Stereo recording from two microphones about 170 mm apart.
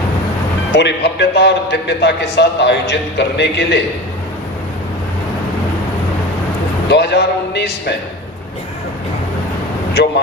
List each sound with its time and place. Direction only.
0.7 s a man's voice: 90° left
6.8 s a man's voice: 80° left